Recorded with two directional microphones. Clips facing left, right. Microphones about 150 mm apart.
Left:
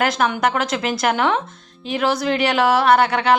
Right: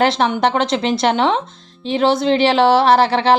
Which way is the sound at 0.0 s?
25° right (ahead or behind).